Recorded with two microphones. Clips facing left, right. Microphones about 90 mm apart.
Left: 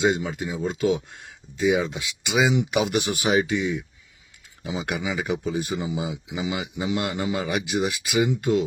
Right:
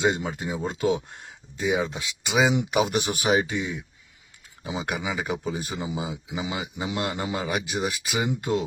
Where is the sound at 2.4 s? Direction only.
10° right (ahead or behind).